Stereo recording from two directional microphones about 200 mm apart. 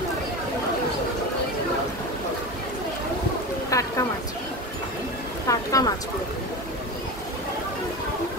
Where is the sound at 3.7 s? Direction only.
15° left (ahead or behind).